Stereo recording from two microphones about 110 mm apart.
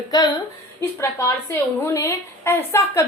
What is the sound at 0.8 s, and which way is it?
A woman's voice, 20° left (ahead or behind).